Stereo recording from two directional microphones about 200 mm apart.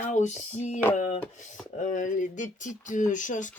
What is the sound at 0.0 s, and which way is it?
Speech, 35° left (ahead or behind).